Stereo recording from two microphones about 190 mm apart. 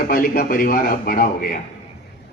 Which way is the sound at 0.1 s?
50° left (ahead or behind).